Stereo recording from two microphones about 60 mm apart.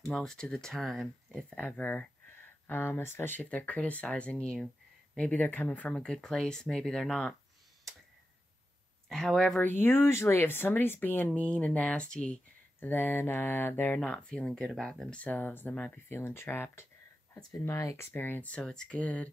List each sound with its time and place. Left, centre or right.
0.0 s speech: centre
1.5 s speech: left
2.6 s speech: left
3.3 s speech: left
5.9 s speech: centre
9.1 s speech: centre
9.6 s speech: left; by 12.4 s centre
12.8 s speech: left
13.9 s speech: centre
15.2 s speech: left
16.1 s speech: left
17.4 s speech: left
18.1 s speech: left
18.5 s speech: centre